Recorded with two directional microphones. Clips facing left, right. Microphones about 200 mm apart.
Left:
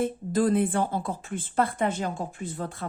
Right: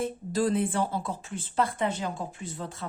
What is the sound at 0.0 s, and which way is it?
Speech, 55° left (ahead or behind).